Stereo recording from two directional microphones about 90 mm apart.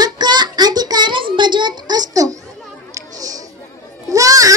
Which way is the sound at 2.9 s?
40° right (ahead or behind).